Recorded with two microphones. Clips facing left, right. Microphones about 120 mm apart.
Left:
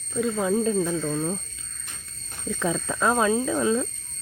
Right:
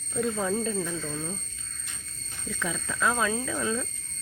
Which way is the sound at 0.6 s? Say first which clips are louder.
Left 7 dB; 25° left (ahead or behind).